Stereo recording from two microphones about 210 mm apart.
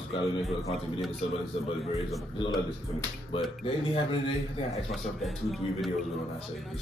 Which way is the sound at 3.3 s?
25° left (ahead or behind).